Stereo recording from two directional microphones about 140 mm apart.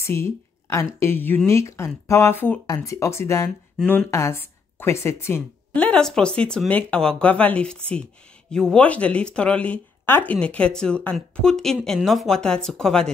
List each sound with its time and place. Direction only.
0.0 s a woman's voice: 20° left (ahead or behind)
3.7 s speech: 10° left (ahead or behind)